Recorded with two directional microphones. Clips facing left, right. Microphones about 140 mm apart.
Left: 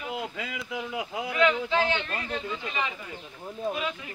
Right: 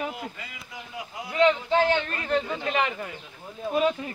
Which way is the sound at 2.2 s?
55° right (ahead or behind).